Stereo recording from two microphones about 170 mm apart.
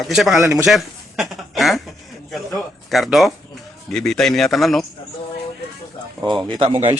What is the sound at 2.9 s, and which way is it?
Speech, centre (ahead or behind).